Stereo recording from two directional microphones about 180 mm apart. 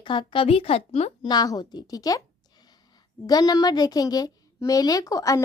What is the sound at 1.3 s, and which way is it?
Speech, 20° left (ahead or behind).